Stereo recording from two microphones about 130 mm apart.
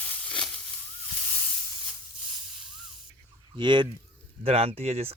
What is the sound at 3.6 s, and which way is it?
Fowl, 35° right (ahead or behind).